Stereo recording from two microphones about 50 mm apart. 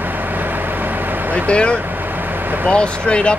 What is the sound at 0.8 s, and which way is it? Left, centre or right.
Vehicle, right.